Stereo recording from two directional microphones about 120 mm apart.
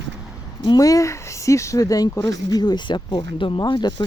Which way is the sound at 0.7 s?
30° left (ahead or behind).